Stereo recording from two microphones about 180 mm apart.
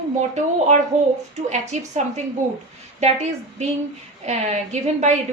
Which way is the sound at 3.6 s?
40° right (ahead or behind).